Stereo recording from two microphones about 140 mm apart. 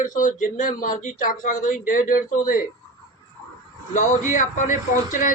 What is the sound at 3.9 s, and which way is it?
Speech, 60° left (ahead or behind).